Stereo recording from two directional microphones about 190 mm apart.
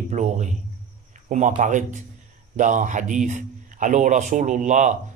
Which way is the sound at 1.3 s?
40° right (ahead or behind).